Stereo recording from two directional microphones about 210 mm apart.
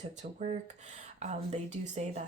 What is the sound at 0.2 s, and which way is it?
Speech, 35° right (ahead or behind).